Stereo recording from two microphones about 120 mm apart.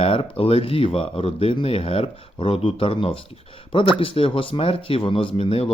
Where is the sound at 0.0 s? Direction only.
50° left (ahead or behind).